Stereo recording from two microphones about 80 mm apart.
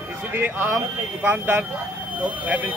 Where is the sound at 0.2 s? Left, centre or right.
Right.